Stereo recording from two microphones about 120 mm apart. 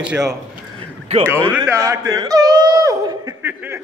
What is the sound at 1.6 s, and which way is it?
A man's voice, 25° right (ahead or behind).